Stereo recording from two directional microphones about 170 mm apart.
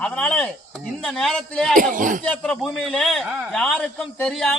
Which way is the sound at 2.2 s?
5° left (ahead or behind).